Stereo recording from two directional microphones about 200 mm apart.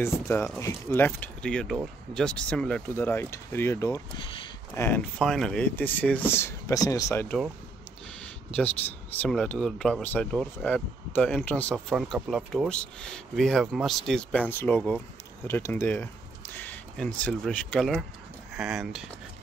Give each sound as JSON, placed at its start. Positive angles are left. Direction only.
{"t": 0.0, "sound": "speech", "side_deg": 10}
{"t": 4.2, "sound": "speech", "side_deg": 25}
{"t": 4.7, "sound": "speech", "side_deg": 10}
{"t": 11.7, "sound": "speech", "side_deg": -5}